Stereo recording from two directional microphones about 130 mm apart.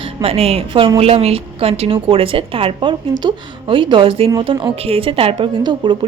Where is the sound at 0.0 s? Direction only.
50° right (ahead or behind).